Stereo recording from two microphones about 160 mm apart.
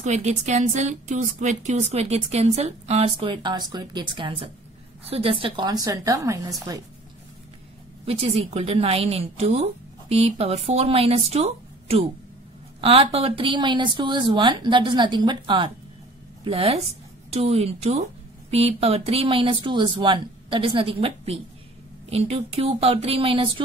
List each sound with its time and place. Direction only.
0.0 s a woman's voice: 45° right (ahead or behind); by 6.5 s 20° right (ahead or behind)
8.0 s a woman's voice: 35° right (ahead or behind)